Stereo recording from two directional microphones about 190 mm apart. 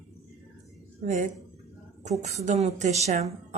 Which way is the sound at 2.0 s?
35° right (ahead or behind).